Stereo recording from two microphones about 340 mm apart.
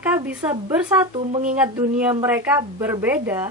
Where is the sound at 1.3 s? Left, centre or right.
Right.